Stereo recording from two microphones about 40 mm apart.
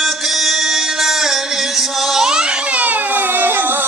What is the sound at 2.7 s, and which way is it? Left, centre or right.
Baby cry, right.